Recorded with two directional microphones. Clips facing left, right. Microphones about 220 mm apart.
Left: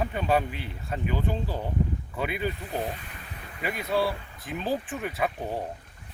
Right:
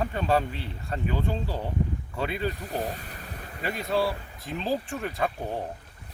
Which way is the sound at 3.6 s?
Centre (ahead or behind).